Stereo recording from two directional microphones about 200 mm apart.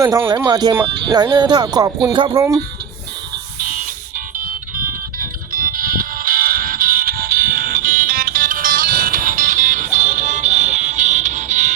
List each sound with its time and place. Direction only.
0.0 s speech: 15° right (ahead or behind)
3.6 s music: 45° right (ahead or behind)